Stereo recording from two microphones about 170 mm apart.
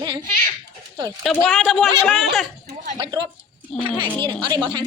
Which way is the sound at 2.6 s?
45° right (ahead or behind).